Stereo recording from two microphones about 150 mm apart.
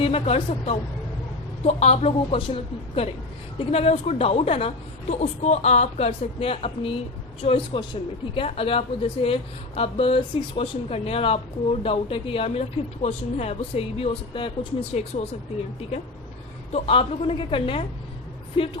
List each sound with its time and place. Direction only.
0.0 s a woman's voice: 40° left (ahead or behind)
16.7 s speech: 40° left (ahead or behind)